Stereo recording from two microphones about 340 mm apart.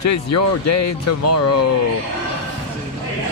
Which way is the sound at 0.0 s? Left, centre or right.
Left.